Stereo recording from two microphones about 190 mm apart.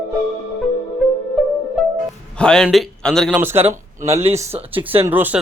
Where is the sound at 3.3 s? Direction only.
10° right (ahead or behind).